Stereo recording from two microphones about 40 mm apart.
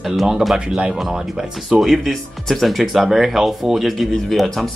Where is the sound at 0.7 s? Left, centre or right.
Right.